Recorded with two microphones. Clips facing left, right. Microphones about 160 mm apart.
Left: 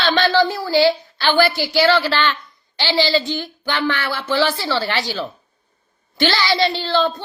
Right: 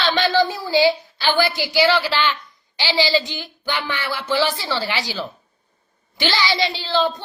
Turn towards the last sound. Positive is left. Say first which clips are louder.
# left 3 dB
turn(degrees=-10)  # may be behind; listen again after turning